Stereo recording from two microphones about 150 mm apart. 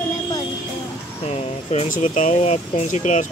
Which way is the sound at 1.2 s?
45° left (ahead or behind).